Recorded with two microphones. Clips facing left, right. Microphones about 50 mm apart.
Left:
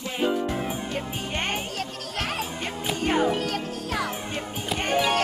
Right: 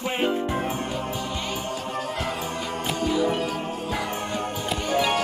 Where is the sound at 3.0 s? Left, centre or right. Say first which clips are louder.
Left 1 dB; left.